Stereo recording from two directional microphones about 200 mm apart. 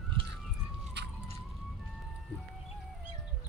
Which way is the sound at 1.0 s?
60° right (ahead or behind).